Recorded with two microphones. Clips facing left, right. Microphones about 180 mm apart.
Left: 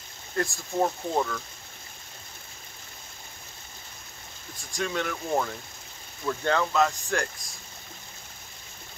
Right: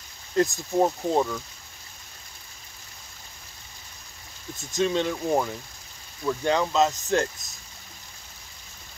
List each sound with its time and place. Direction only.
0.4 s speech: 20° right (ahead or behind)
4.6 s speech: 20° right (ahead or behind)